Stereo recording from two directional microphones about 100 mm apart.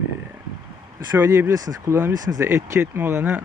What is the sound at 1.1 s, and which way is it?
Speech, 25° right (ahead or behind).